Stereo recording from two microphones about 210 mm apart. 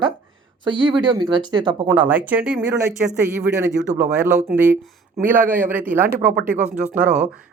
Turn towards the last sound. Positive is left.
turn(degrees=-5)  # may be behind; listen again after turning